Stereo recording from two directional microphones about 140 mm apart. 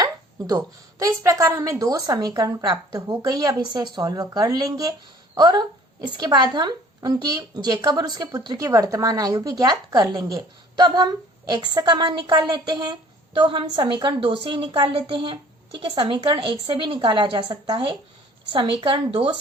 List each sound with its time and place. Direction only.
0.0 s a woman's voice: 25° right (ahead or behind)